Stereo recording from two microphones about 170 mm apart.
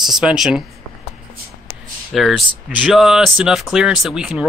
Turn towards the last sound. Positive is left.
turn(degrees=-5)  # may be behind; listen again after turning